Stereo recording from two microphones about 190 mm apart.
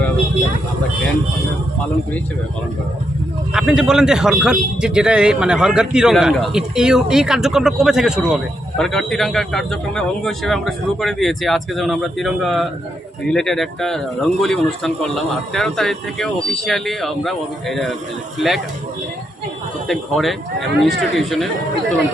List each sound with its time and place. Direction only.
3.5 s a man's voice: 5° right (ahead or behind)
19.9 s a man's voice: centre (ahead or behind)